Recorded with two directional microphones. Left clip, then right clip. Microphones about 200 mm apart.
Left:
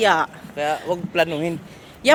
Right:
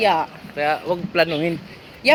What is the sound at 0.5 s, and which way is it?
A man's voice, 25° right (ahead or behind).